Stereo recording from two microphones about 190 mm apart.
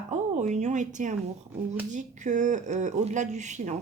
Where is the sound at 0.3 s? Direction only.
40° right (ahead or behind).